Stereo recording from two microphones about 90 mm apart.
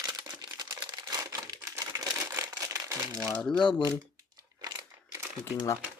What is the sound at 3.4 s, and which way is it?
Speech, 5° left (ahead or behind).